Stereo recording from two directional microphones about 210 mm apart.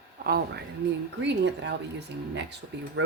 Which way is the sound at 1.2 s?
55° right (ahead or behind).